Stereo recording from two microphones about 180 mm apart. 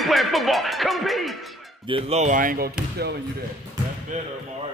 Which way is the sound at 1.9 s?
35° right (ahead or behind).